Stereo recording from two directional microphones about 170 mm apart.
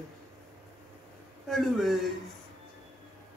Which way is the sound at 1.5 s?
Centre (ahead or behind).